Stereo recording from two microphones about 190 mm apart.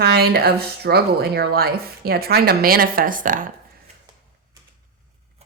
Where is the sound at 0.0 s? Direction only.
55° right (ahead or behind).